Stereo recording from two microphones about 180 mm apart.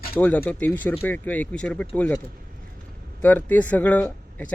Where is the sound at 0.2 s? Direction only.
10° left (ahead or behind).